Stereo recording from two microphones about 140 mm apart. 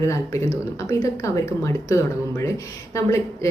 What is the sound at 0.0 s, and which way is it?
Speech, 20° left (ahead or behind).